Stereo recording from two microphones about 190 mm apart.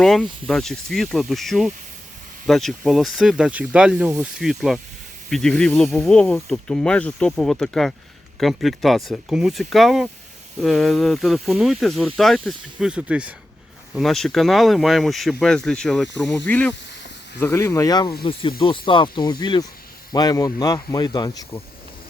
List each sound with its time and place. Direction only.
0.0 s speech: centre (ahead or behind); by 21.6 s 20° left (ahead or behind)